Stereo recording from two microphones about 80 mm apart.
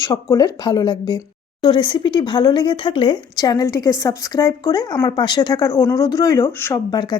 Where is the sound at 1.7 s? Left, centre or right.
Left.